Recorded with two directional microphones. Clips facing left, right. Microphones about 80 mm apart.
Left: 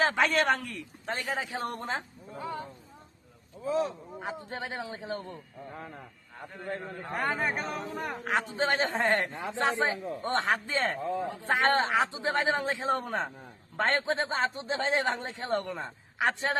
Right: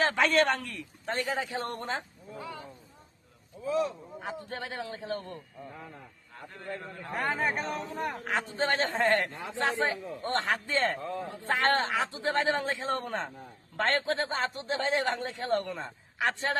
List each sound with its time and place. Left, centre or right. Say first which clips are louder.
0.0 s a man's voice: right 1 dB; centre
2.4 s a sound: left 5 dB; left
3.7 s speech: even; left
4.2 s a man's voice: left 1 dB; left
6.7 s a man's voice: left 3 dB; left
7.1 s a man's voice: even; centre
8.1 s a man's voice: left 2 dB; centre